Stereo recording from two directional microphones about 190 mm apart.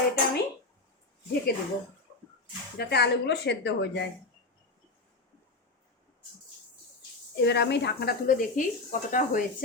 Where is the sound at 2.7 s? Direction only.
60° left (ahead or behind).